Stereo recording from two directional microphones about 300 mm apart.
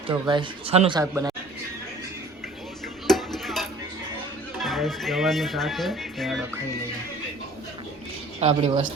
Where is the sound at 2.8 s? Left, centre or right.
Centre.